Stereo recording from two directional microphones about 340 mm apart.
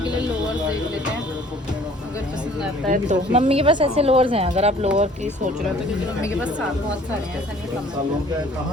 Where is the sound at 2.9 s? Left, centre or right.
Centre.